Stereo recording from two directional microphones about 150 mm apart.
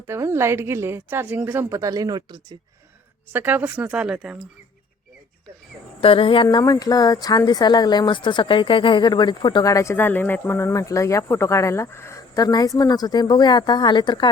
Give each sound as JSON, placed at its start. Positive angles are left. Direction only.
{"t": 0.1, "sound": "a woman's voice", "side_deg": -15}
{"t": 3.3, "sound": "a woman's voice", "side_deg": -10}
{"t": 6.0, "sound": "speech", "side_deg": 35}